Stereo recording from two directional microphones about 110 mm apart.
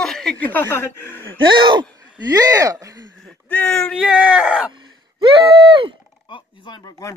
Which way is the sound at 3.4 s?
10° left (ahead or behind).